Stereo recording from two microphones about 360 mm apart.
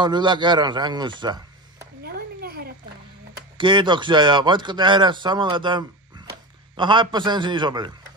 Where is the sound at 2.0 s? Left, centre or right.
Right.